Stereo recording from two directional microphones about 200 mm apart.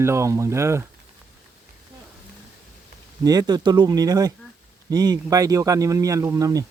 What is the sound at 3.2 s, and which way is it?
Speech, 20° right (ahead or behind).